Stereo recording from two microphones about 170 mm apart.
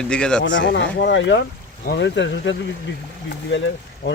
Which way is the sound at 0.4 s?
90° left.